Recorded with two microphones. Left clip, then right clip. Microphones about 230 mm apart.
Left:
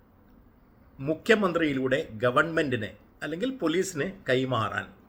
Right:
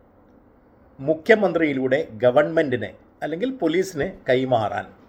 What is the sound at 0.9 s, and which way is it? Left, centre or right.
Speech, centre.